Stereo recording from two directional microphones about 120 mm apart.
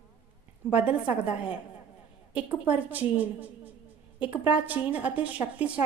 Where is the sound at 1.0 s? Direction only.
10° right (ahead or behind).